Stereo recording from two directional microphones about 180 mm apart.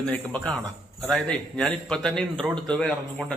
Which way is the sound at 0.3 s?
5° left (ahead or behind).